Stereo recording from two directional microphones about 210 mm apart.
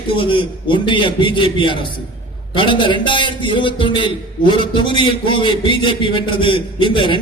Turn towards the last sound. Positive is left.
turn(degrees=20)  # may be behind; listen again after turning